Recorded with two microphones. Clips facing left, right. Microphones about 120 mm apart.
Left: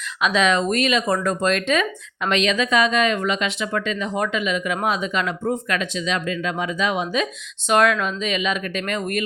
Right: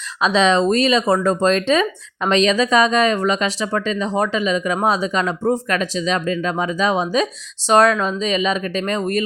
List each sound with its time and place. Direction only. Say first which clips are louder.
0.2 s speech: right 4 dB; 30° right (ahead or behind)